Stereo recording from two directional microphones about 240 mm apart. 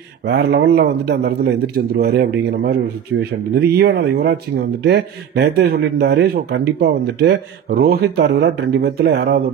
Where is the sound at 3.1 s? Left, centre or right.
Right.